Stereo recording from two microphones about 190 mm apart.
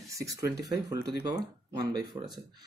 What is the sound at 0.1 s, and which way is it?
Speech, 15° right (ahead or behind).